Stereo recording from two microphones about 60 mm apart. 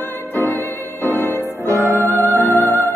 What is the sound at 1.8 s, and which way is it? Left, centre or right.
Music, right.